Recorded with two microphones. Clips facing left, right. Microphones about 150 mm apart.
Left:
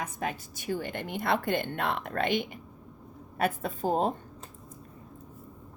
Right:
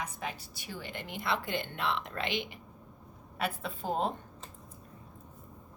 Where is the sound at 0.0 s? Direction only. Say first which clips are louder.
Left 5 dB; 50° left (ahead or behind).